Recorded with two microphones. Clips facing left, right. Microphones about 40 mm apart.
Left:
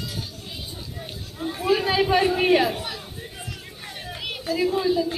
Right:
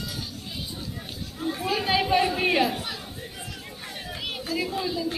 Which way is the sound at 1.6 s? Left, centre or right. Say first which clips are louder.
Left 7 dB; left.